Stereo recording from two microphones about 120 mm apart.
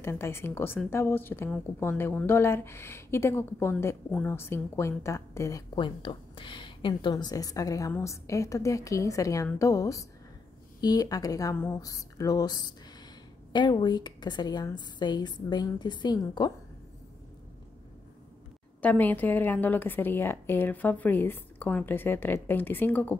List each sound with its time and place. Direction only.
0.0 s a woman's voice: 20° left (ahead or behind)
5.8 s a woman's voice: 45° left (ahead or behind)
18.8 s a woman's voice: 15° left (ahead or behind)